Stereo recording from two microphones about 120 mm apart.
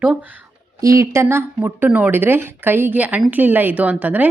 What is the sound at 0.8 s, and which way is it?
Speech, 25° right (ahead or behind).